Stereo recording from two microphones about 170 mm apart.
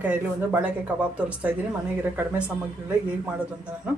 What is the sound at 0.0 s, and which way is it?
Speech, 10° right (ahead or behind).